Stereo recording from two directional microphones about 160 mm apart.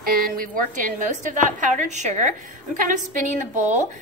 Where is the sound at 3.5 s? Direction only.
45° right (ahead or behind).